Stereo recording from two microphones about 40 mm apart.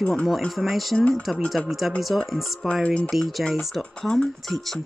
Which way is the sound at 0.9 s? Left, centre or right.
Left.